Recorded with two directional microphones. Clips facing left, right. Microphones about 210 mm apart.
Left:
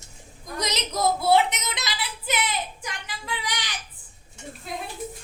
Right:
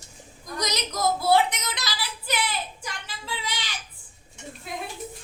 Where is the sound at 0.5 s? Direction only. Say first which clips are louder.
Left 1 dB; 25° left (ahead or behind).